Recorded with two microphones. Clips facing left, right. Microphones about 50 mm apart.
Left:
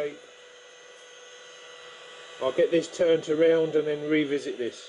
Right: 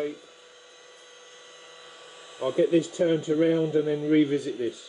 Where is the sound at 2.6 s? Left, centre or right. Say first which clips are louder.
Right 2 dB; left.